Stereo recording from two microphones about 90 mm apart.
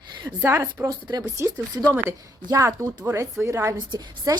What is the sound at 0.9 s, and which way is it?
Speech, 45° right (ahead or behind).